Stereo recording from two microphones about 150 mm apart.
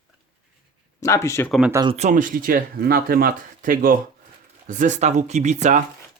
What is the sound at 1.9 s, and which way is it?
Speech, 55° right (ahead or behind).